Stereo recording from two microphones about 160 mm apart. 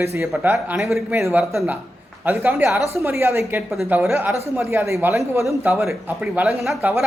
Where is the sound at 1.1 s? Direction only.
15° right (ahead or behind).